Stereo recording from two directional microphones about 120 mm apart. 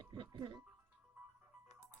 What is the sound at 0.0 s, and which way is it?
Music, 40° right (ahead or behind).